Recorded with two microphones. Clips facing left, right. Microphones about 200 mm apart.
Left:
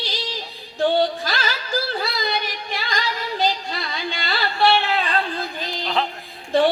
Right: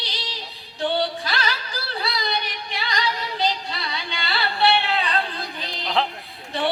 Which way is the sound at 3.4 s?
45° left (ahead or behind).